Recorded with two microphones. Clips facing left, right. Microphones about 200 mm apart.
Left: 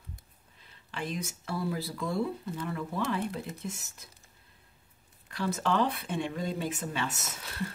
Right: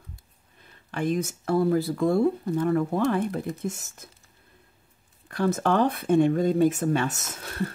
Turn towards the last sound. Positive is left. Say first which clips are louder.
# right 6 dB
turn(degrees=-50)  # may be behind; listen again after turning